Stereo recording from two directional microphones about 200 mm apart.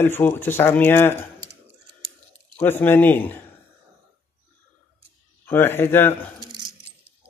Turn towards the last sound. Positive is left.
turn(degrees=-20)  # may be behind; listen again after turning